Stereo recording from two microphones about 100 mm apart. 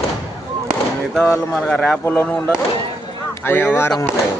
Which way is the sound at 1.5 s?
5° left (ahead or behind).